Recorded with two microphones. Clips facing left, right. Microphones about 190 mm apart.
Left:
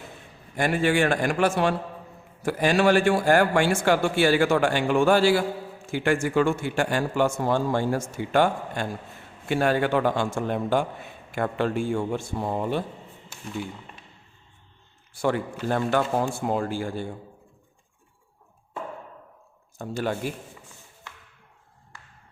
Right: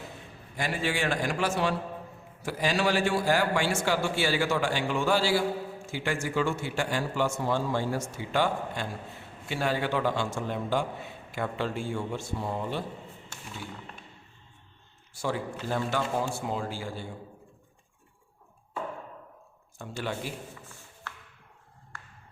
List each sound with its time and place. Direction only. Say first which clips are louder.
0.5 s a man's voice: left 8 dB; 55° left (ahead or behind)
15.1 s a man's voice: left 6 dB; 60° left (ahead or behind)
19.8 s a man's voice: left 6 dB; 45° left (ahead or behind)